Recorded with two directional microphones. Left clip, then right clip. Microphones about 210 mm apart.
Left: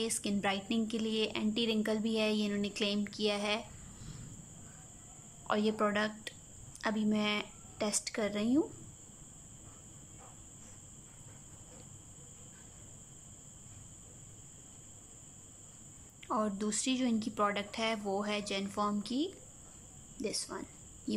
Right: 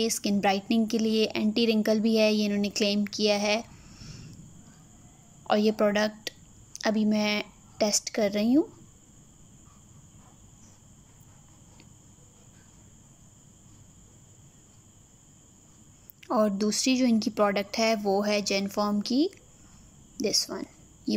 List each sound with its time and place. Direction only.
0.0 s speech: 20° right (ahead or behind)
5.5 s a woman's voice: 15° right (ahead or behind)
16.2 s speech: 20° right (ahead or behind)